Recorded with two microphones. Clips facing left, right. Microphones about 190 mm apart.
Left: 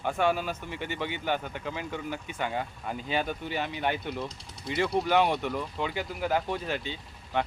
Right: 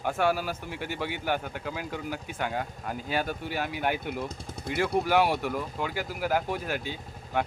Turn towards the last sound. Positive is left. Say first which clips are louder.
# right 1 dB
turn(degrees=-10)  # may be behind; listen again after turning